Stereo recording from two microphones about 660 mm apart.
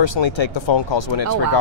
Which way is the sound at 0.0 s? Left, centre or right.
Left.